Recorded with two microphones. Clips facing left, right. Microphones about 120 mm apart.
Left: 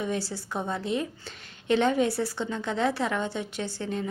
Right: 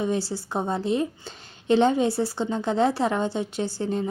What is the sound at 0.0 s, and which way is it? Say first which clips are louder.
A woman's voice: right 4 dB; 30° right (ahead or behind).